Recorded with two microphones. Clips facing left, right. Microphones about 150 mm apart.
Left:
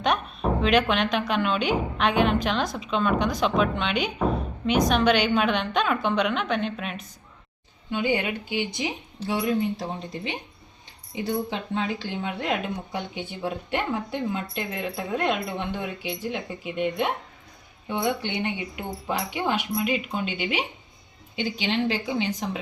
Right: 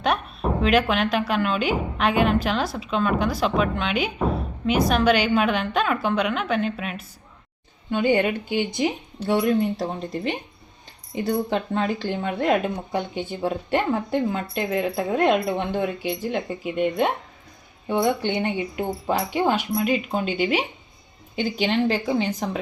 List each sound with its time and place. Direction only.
0.6 s a woman's voice: 5° right (ahead or behind)
7.9 s speech: 45° right (ahead or behind)